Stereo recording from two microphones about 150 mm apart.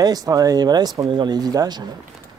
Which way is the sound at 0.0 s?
25° right (ahead or behind).